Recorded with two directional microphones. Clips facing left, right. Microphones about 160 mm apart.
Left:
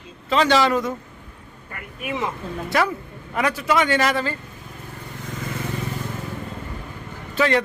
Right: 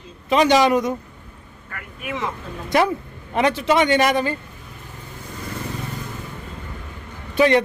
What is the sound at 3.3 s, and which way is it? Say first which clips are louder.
A man's voice: right 3 dB; 25° right (ahead or behind).